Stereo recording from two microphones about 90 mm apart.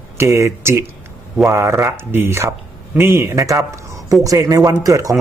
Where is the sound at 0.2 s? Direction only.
30° right (ahead or behind).